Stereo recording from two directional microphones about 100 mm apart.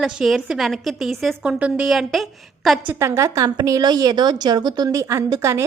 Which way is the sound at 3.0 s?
30° right (ahead or behind).